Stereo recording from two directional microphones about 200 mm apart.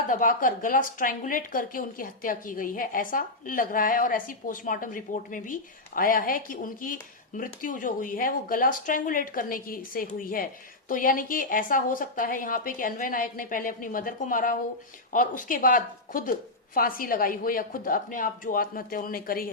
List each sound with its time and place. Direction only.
0.1 s a woman's voice: 45° left (ahead or behind)